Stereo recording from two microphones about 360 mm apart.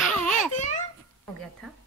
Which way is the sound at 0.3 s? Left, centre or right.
Centre.